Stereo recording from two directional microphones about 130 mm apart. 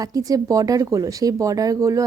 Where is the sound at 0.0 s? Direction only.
30° right (ahead or behind).